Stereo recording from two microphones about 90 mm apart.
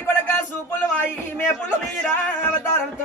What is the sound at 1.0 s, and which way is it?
Speech, 25° left (ahead or behind).